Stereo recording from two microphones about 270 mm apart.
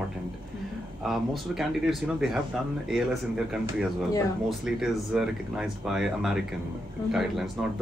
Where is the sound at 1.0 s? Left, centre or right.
Centre.